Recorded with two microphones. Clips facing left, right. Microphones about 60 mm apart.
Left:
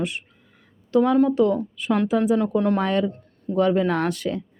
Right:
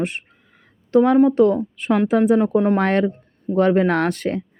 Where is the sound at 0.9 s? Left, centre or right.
Right.